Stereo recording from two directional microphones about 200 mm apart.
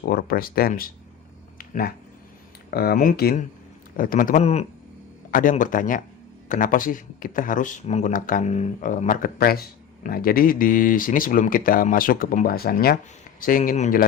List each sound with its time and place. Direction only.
0.1 s speech: 50° left (ahead or behind)
1.5 s a sound: 45° left (ahead or behind)
2.6 s speech: 50° left (ahead or behind)